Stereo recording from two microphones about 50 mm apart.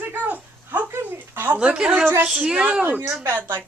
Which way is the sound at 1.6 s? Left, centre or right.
Right.